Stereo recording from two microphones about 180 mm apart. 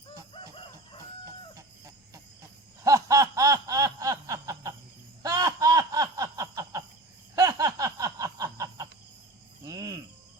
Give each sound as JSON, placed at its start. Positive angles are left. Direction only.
{"t": 1.5, "sound": "chicken", "side_deg": -20}
{"t": 2.8, "sound": "snicker", "side_deg": -20}
{"t": 5.2, "sound": "a sound", "side_deg": -20}
{"t": 9.6, "sound": "cricket", "side_deg": -20}